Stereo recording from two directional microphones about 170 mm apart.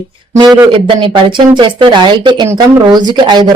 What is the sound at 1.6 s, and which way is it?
Speech, 25° right (ahead or behind).